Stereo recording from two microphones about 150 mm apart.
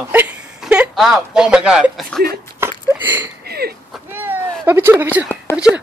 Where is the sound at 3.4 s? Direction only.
90° right.